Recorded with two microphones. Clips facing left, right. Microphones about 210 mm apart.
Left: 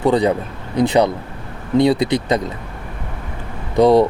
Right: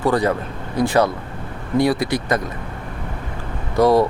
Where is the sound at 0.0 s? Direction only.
20° left (ahead or behind).